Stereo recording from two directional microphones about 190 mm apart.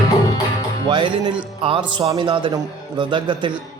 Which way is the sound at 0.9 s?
25° right (ahead or behind).